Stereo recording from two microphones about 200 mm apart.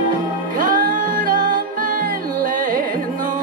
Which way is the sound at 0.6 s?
45° right (ahead or behind).